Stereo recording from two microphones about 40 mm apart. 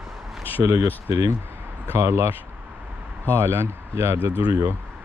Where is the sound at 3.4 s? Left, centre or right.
Right.